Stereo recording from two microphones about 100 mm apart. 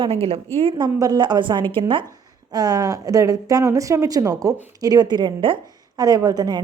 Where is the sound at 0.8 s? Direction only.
45° right (ahead or behind).